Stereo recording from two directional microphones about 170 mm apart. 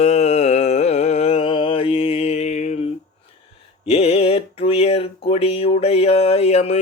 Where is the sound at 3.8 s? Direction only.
35° left (ahead or behind).